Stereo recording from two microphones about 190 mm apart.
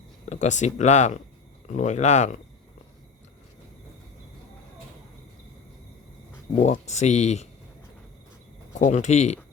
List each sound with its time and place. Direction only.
0.3 s speech: 40° left (ahead or behind)
6.6 s speech: 35° left (ahead or behind)
8.8 s speech: 40° left (ahead or behind)